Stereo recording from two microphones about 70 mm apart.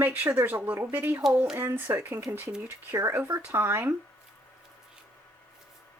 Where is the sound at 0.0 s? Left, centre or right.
Right.